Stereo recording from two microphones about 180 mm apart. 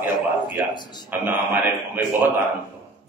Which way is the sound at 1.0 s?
10° right (ahead or behind).